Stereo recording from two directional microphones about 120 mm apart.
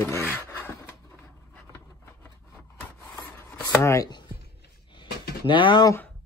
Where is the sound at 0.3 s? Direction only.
20° left (ahead or behind).